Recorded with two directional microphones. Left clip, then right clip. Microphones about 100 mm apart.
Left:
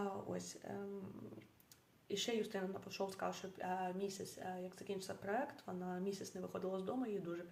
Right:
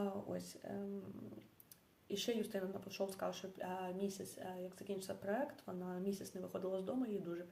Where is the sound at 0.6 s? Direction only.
Centre (ahead or behind).